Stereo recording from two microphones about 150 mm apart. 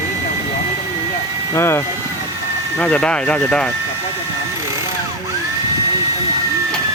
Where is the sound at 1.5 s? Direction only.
15° left (ahead or behind).